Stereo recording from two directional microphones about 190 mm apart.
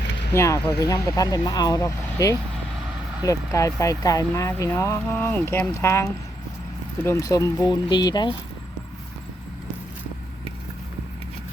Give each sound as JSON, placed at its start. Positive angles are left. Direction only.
{"t": 0.3, "sound": "speech", "side_deg": 15}